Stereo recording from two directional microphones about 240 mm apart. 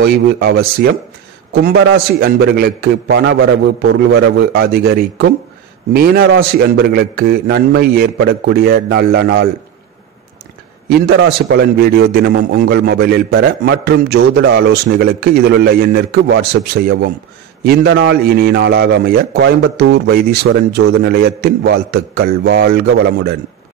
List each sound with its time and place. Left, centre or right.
0.0 s a man's voice: right
10.9 s a man's voice: right
20.4 s a man's voice: right